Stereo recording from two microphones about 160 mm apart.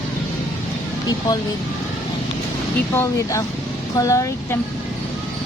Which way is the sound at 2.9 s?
20° left (ahead or behind).